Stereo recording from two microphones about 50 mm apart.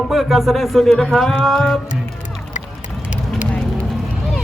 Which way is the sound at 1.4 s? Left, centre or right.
Centre.